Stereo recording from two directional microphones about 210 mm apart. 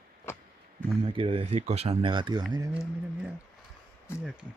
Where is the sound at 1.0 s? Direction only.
25° right (ahead or behind).